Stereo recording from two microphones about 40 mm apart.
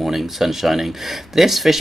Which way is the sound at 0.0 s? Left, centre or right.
Centre.